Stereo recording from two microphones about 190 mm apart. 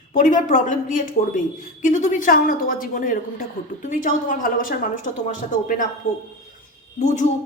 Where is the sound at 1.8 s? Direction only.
40° left (ahead or behind).